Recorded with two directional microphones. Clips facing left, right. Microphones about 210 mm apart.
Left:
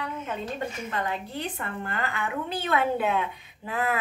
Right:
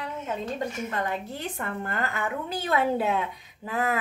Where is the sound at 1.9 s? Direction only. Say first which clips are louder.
Even; 45° right (ahead or behind).